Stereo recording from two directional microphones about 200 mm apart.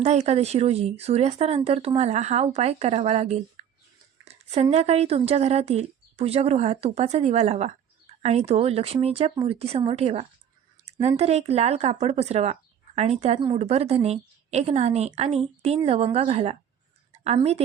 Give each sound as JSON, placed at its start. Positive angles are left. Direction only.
{"t": 0.0, "sound": "speech", "side_deg": -35}
{"t": 4.7, "sound": "speech", "side_deg": -30}